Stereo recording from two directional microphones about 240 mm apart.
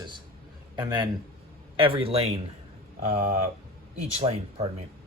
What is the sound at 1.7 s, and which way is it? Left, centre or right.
A man's voice, right.